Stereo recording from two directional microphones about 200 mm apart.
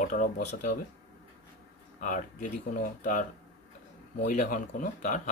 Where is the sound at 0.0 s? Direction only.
40° left (ahead or behind).